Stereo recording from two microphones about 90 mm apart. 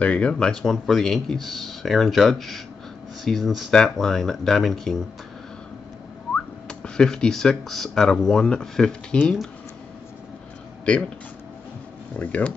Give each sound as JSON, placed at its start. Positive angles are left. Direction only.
{"t": 0.0, "sound": "speech", "side_deg": 15}
{"t": 6.3, "sound": "speech", "side_deg": 10}
{"t": 12.2, "sound": "speech", "side_deg": 15}